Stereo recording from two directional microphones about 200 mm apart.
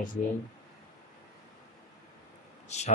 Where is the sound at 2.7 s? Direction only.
35° left (ahead or behind).